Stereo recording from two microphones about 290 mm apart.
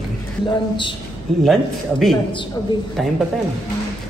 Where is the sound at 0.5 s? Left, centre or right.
Centre.